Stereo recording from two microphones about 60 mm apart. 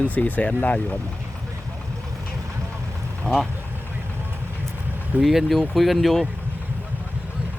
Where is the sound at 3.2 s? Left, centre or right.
Centre.